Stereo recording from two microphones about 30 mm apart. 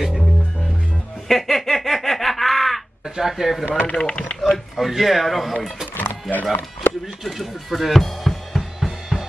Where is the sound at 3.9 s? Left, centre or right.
Left.